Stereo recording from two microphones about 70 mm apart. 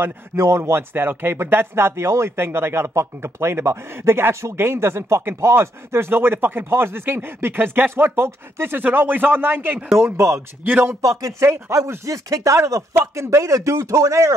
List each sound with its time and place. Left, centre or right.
0.0 s speech: right
9.9 s speech: right